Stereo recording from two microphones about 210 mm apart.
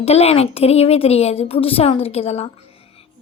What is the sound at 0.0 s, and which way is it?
Speech, 30° left (ahead or behind).